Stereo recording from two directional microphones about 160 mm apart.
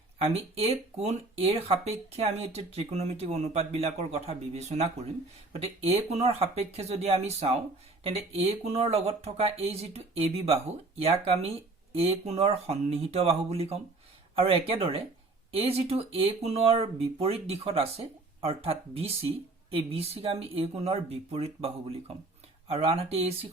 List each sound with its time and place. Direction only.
0.2 s speech: 40° right (ahead or behind)